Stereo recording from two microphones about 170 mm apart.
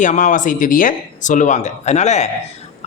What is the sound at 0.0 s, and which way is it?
A man's voice, 45° left (ahead or behind).